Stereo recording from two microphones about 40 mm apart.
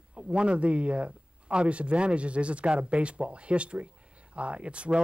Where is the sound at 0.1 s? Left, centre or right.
Right.